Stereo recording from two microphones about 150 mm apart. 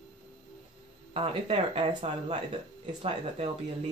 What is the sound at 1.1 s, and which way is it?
Speech, 40° right (ahead or behind).